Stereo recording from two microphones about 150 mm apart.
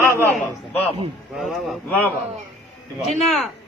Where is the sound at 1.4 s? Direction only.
Centre (ahead or behind).